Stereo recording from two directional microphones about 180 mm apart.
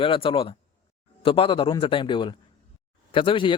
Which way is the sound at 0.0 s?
30° left (ahead or behind).